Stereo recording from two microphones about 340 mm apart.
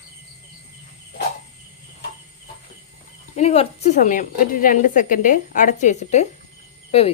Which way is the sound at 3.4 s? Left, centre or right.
Centre.